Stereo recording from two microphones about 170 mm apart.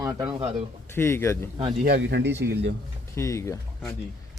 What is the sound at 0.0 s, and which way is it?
Speech, 20° right (ahead or behind).